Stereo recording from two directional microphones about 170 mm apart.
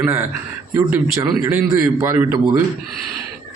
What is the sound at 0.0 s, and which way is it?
A man's voice, 15° right (ahead or behind).